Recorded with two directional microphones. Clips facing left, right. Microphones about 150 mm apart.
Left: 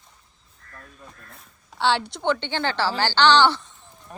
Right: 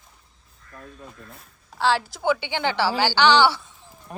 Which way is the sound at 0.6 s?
50° left (ahead or behind).